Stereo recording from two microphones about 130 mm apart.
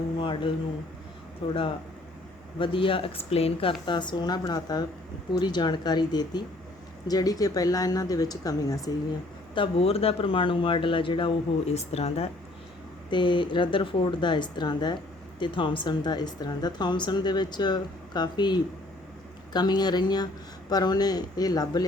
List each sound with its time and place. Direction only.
0.2 s speech: 40° left (ahead or behind)
2.6 s speech: 40° left (ahead or behind)
9.6 s speech: 50° left (ahead or behind)
11.7 s speech: 55° left (ahead or behind)
13.1 s speech: 35° left (ahead or behind)